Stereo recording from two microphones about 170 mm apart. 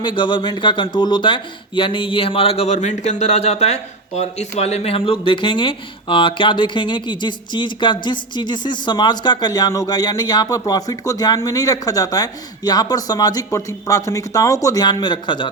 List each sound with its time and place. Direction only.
0.0 s speech: 25° left (ahead or behind)